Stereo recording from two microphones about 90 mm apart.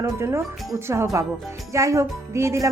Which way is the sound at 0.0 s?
30° right (ahead or behind).